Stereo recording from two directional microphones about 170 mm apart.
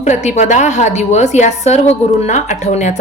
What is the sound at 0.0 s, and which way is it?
A woman's voice, 45° left (ahead or behind).